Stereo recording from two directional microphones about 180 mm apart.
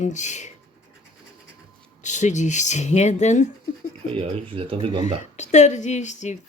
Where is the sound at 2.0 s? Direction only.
40° left (ahead or behind).